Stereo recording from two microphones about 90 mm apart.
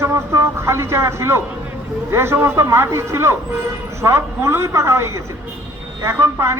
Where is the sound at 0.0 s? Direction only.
30° right (ahead or behind).